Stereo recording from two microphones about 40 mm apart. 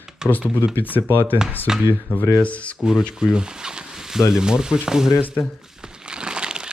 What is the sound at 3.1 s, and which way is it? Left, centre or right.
Speech, centre.